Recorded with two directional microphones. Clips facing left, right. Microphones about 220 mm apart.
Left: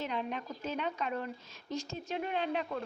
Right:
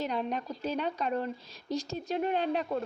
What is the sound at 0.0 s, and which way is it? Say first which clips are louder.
A woman's voice: right 4 dB; 40° right (ahead or behind).